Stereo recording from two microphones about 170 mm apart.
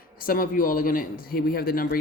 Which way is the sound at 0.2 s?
55° left (ahead or behind).